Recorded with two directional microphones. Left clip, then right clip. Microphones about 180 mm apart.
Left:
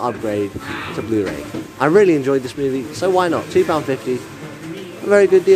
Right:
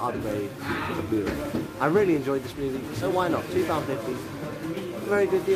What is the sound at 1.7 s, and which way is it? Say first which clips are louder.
Speech: left 10 dB; 40° left (ahead or behind).